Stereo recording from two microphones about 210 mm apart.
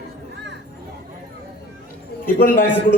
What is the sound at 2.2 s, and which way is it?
Speech, 40° left (ahead or behind).